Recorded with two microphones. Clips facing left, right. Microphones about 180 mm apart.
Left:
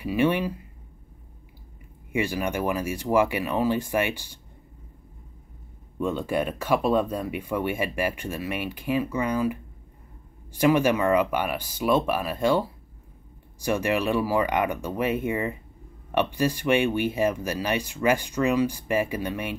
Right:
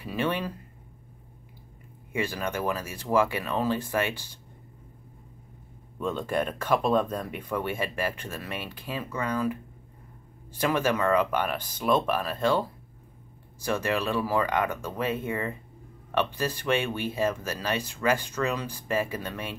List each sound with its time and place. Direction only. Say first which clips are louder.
0.0 s speech: left 6 dB; 15° left (ahead or behind)
2.1 s speech: left 4 dB; 15° left (ahead or behind)
5.9 s speech: left 2 dB; 10° left (ahead or behind)
10.6 s speech: left 5 dB; 15° left (ahead or behind)